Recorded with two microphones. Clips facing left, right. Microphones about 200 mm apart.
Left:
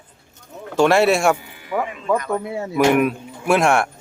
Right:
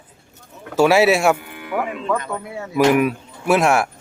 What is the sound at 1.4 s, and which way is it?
Music, 60° right (ahead or behind).